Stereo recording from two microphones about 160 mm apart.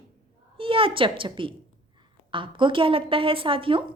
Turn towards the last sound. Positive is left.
turn(degrees=-35)  # may be behind; listen again after turning